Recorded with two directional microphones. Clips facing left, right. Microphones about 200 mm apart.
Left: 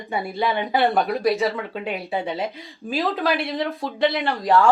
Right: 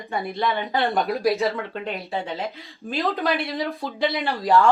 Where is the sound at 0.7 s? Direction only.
Centre (ahead or behind).